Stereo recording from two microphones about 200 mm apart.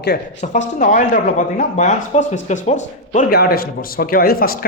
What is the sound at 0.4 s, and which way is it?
Speech, 35° left (ahead or behind).